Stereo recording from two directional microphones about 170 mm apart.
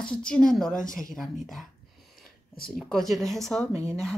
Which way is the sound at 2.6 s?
Centre (ahead or behind).